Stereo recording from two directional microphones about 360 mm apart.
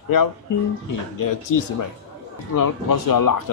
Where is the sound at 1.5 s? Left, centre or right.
Left.